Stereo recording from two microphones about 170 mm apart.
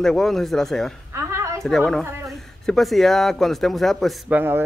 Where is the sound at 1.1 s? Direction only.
15° right (ahead or behind).